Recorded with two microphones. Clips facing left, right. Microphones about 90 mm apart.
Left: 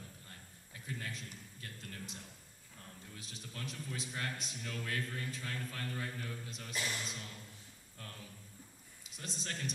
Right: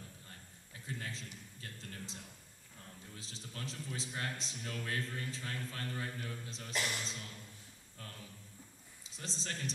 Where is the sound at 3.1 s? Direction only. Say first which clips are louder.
Even; 30° right (ahead or behind).